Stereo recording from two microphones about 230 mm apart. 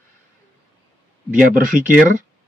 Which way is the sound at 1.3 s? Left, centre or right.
Right.